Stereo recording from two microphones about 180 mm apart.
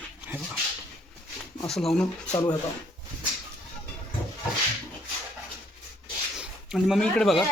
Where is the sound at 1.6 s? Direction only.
Centre (ahead or behind).